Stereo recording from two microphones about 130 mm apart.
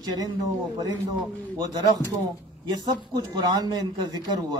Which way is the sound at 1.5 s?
30° right (ahead or behind).